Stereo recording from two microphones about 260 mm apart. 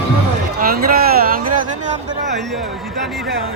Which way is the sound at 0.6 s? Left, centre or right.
Right.